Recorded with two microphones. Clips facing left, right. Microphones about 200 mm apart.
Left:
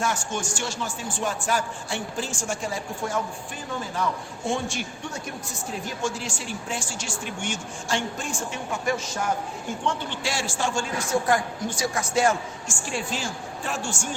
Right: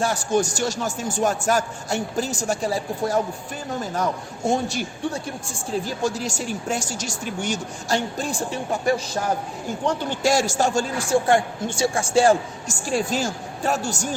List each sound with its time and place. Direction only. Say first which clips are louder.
0.0 s a man's voice: right 7 dB; 35° right (ahead or behind)